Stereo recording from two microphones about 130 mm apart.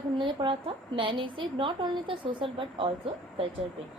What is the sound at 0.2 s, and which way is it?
A woman's voice, 40° right (ahead or behind).